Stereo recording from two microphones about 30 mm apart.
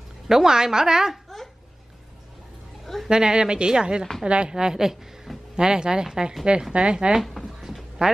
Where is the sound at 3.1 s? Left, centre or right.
Right.